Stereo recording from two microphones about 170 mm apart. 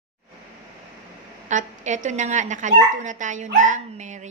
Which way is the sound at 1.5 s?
45° right (ahead or behind).